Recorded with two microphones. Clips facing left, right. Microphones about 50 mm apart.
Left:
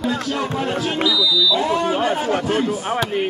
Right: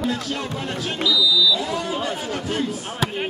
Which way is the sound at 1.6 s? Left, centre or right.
Left.